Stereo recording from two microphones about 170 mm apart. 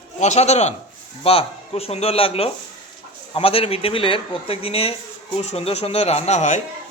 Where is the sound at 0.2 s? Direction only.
40° left (ahead or behind).